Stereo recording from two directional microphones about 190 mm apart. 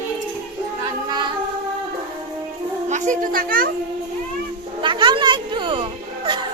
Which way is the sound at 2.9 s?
40° right (ahead or behind).